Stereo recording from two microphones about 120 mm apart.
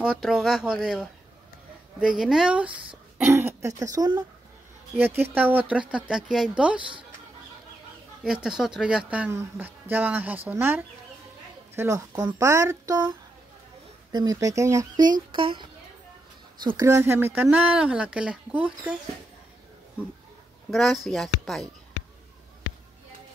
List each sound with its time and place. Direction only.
0.0 s speech: 5° right (ahead or behind)
3.3 s speech: 20° right (ahead or behind)
4.9 s speech: 20° right (ahead or behind)
8.2 s speech: 5° right (ahead or behind)
9.3 s speech: 20° right (ahead or behind)
14.1 s speech: 30° right (ahead or behind)
16.7 s speech: 25° right (ahead or behind)
20.7 s speech: centre (ahead or behind)